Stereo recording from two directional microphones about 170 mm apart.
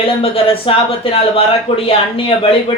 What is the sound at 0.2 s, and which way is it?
Speech, 35° left (ahead or behind).